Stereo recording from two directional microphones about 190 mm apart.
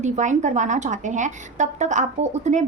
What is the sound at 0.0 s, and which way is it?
A woman's voice, 40° right (ahead or behind).